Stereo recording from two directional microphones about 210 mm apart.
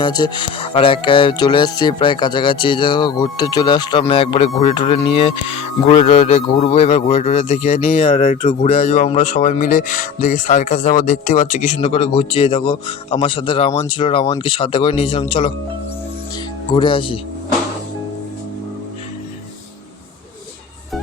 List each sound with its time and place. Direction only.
0.0 s speech: 20° left (ahead or behind)
8.6 s speech: 35° left (ahead or behind)
16.7 s speech: 25° left (ahead or behind)